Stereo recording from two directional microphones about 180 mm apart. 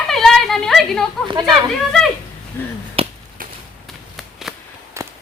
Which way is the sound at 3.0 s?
30° right (ahead or behind).